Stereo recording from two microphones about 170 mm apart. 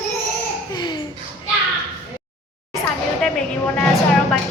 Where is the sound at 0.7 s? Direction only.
25° left (ahead or behind).